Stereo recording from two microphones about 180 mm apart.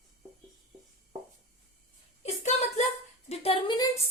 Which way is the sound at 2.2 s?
40° left (ahead or behind).